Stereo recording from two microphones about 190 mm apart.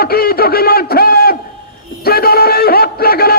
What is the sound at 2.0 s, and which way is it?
Music, 55° left (ahead or behind).